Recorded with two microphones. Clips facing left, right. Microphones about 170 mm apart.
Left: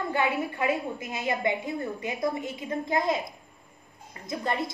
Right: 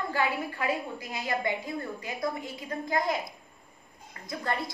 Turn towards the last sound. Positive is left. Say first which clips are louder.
# left 3 dB
turn(degrees=20)  # may be behind; listen again after turning